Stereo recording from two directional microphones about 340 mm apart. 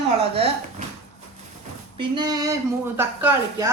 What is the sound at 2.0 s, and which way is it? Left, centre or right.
Speech, centre.